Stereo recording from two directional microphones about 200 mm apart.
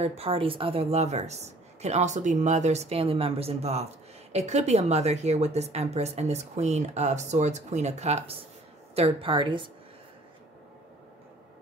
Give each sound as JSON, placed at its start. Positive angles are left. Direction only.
{"t": 0.0, "sound": "a woman's voice", "side_deg": -30}